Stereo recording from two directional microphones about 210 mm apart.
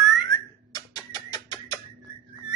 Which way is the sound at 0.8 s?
20° left (ahead or behind).